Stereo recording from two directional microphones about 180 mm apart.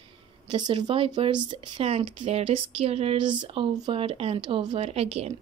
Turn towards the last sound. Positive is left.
turn(degrees=-35)  # may be behind; listen again after turning